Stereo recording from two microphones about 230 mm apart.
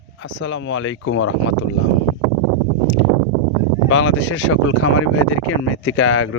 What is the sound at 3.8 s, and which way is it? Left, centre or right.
Speech, left.